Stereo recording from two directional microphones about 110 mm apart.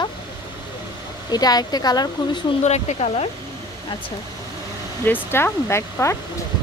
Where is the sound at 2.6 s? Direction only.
90° left.